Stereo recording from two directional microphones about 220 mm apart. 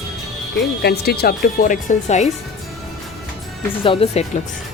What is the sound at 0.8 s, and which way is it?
Speech, 45° left (ahead or behind).